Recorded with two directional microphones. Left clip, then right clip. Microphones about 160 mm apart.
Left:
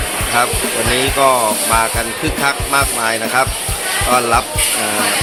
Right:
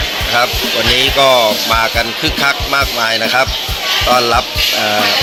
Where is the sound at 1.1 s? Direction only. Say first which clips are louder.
Right 2 dB; 60° right (ahead or behind).